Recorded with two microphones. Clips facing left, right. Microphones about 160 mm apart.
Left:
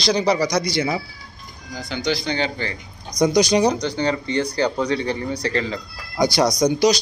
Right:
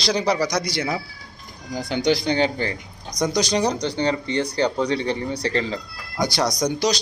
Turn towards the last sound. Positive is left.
turn(degrees=5)  # may be behind; listen again after turning